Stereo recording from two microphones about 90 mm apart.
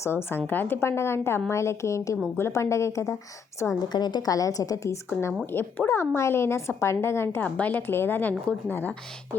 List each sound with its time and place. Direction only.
0.0 s a woman's voice: 25° left (ahead or behind)
3.8 s a woman's voice: 50° left (ahead or behind); by 5.3 s 35° left (ahead or behind)
5.5 s a woman's voice: 25° left (ahead or behind)
7.4 s a woman's voice: 15° left (ahead or behind)